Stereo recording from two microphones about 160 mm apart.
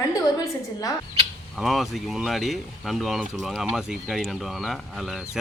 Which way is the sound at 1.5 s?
Centre (ahead or behind).